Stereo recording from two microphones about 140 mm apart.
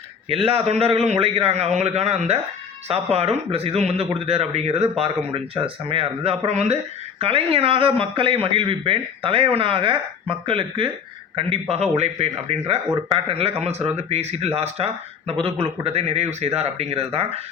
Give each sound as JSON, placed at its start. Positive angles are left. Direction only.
{"t": 0.3, "sound": "a man's voice", "side_deg": -45}